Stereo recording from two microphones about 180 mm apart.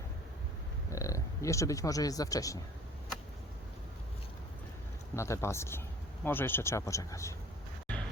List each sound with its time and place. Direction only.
0.9 s speech: 15° left (ahead or behind)
5.1 s speech: 15° left (ahead or behind)